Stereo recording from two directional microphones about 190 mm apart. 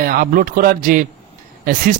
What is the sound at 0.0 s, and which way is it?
Speech, 50° right (ahead or behind).